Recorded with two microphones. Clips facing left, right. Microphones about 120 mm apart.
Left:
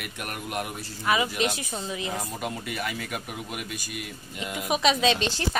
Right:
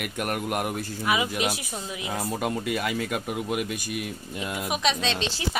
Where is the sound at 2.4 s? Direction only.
45° right (ahead or behind).